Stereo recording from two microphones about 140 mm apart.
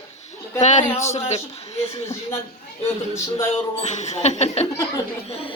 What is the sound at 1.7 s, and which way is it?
Speech, 20° left (ahead or behind).